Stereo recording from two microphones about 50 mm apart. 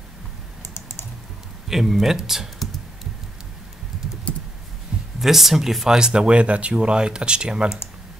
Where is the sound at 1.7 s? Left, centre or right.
Centre.